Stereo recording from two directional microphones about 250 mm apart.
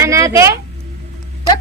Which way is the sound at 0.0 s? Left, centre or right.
Centre.